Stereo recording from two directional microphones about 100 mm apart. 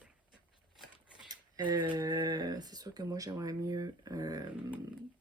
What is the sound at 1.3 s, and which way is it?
Speech, 45° right (ahead or behind).